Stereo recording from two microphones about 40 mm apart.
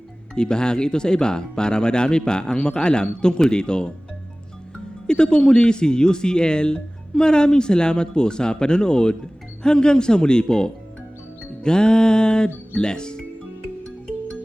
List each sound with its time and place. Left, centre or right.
0.3 s speech: left
5.0 s speech: left